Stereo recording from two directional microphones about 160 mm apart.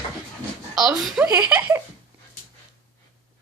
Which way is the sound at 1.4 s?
10° right (ahead or behind).